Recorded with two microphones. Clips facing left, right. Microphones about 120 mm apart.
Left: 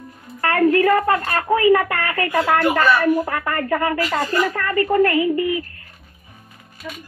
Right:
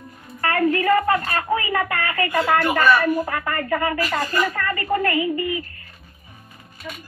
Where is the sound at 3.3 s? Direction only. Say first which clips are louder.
Left 2 dB; 55° left (ahead or behind).